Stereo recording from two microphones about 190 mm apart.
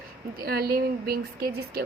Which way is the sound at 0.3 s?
55° right (ahead or behind).